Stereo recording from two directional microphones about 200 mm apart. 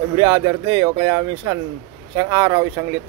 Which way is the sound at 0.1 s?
25° right (ahead or behind).